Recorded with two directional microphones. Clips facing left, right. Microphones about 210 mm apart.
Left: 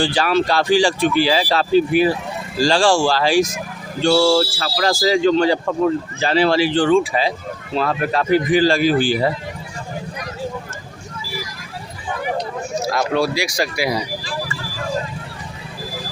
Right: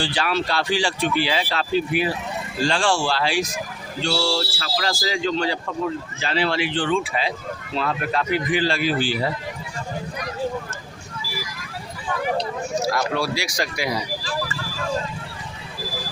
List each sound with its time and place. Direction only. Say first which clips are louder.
0.0 s speech: left 6 dB; 45° left (ahead or behind)
12.8 s speech: left 6 dB; 20° left (ahead or behind)